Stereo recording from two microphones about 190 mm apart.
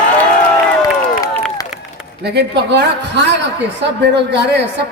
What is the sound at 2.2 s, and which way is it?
A woman's voice, 60° right (ahead or behind).